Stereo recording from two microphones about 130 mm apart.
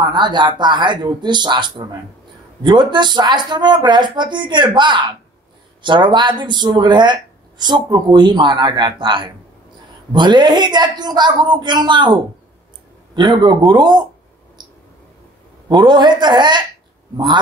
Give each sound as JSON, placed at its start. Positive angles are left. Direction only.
{"t": 0.1, "sound": "speech", "side_deg": -35}
{"t": 14.6, "sound": "mouse", "side_deg": -35}
{"t": 15.7, "sound": "speech", "side_deg": -35}